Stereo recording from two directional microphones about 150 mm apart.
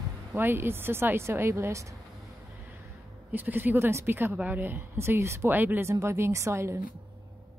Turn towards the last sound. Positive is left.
turn(degrees=-20)  # may be behind; listen again after turning